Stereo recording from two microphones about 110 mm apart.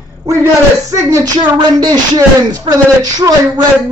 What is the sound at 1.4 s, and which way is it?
Speech, 40° right (ahead or behind).